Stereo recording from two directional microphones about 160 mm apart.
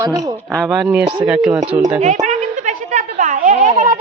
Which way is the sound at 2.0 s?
50° right (ahead or behind).